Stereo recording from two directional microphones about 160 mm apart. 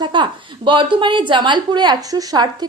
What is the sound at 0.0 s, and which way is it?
A woman's voice, 30° right (ahead or behind).